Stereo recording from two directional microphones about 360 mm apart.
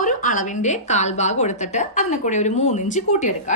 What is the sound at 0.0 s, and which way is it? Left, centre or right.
A woman's voice, left.